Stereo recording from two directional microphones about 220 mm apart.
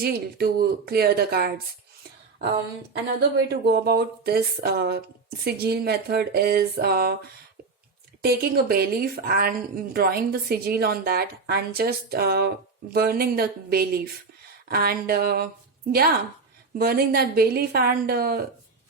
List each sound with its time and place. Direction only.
0.0 s a woman's voice: 45° right (ahead or behind)
3.2 s a woman's voice: 45° right (ahead or behind)
8.2 s a woman's voice: 45° right (ahead or behind)